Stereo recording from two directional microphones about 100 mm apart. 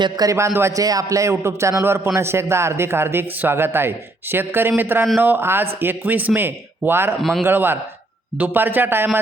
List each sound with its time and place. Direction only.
0.0 s a man's voice: 35° right (ahead or behind); by 7.1 s 20° right (ahead or behind)
7.2 s a man's voice: centre (ahead or behind)
7.4 s a man's voice: 20° right (ahead or behind)